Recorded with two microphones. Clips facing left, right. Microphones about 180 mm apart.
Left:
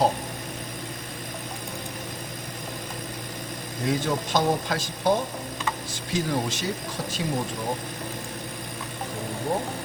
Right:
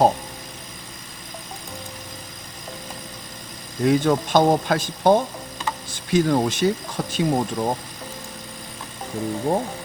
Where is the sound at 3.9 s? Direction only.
60° right (ahead or behind).